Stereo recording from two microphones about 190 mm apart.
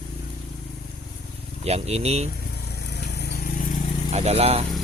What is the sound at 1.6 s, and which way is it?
Speech, 35° right (ahead or behind).